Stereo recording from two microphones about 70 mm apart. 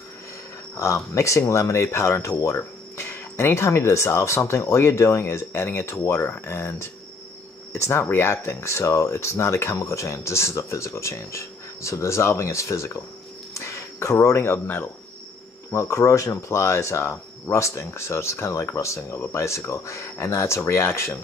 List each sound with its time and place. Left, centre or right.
0.7 s speech: left
15.7 s speech: left